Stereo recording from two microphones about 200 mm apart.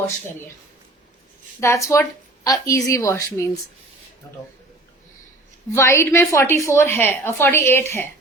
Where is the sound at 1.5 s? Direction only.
15° left (ahead or behind).